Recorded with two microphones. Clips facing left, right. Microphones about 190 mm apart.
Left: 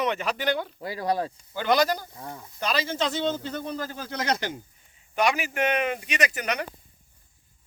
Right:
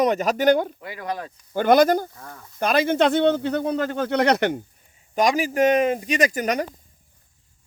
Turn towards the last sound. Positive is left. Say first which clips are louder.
# right 6 dB
turn(degrees=-40)  # may be behind; listen again after turning